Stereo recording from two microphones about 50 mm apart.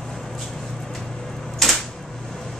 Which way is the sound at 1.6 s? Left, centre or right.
Centre.